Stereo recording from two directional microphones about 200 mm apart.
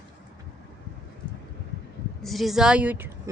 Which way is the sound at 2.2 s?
Centre (ahead or behind).